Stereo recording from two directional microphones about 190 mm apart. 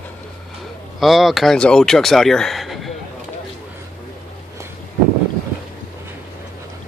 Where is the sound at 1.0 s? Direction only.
Centre (ahead or behind).